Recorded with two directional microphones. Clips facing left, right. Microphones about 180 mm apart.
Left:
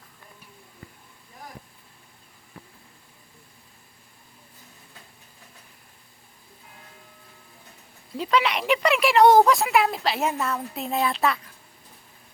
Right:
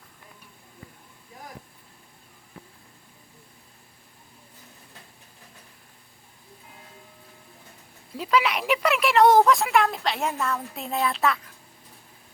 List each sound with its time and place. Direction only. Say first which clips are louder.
8.1 s speech: even; 5° right (ahead or behind)